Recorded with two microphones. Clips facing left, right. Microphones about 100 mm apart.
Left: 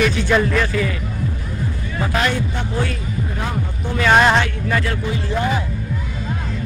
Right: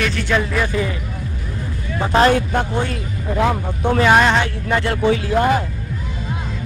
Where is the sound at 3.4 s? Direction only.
55° right (ahead or behind).